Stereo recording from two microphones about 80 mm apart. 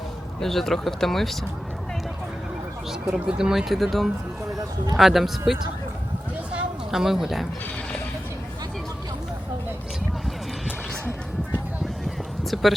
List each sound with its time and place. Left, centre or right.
0.3 s speech: centre
3.1 s speech: centre
6.5 s a sound: centre
7.0 s speech: centre